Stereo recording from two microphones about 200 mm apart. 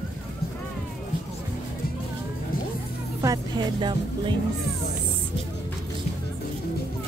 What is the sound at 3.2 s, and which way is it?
Music, 20° right (ahead or behind).